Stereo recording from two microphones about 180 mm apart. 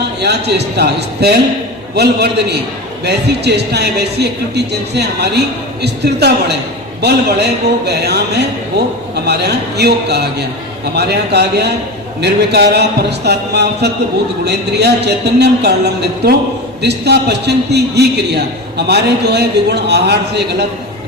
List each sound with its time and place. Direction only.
0.2 s a man's voice: 65° right (ahead or behind)